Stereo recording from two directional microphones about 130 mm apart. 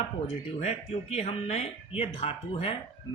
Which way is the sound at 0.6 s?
55° left (ahead or behind).